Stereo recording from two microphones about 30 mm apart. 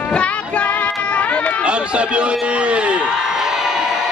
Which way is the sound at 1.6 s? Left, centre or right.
Right.